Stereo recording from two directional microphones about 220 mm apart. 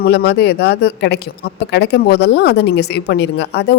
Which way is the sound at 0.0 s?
45° left (ahead or behind).